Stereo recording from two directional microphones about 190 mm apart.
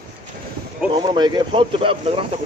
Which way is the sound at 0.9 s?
25° right (ahead or behind).